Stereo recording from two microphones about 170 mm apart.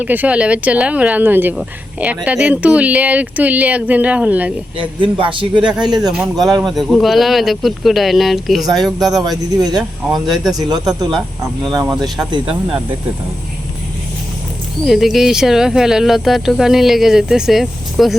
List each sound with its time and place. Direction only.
0.0 s speech: 10° right (ahead or behind)
4.8 s a man's voice: 30° right (ahead or behind)
6.0 s speech: 5° right (ahead or behind)
8.6 s a man's voice: 20° right (ahead or behind)
9.0 s speech: centre (ahead or behind)
11.6 s a man's voice: 20° right (ahead or behind)
14.8 s speech: centre (ahead or behind)